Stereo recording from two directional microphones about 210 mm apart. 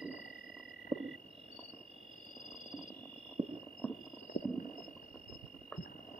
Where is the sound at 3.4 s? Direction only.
30° right (ahead or behind).